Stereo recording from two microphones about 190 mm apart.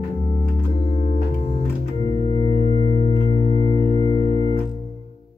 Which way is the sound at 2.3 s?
30° left (ahead or behind).